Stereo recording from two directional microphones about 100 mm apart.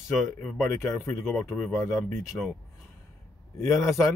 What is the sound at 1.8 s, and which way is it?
Speech, 35° left (ahead or behind).